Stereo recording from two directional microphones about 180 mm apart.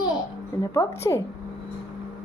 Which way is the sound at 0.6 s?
15° left (ahead or behind).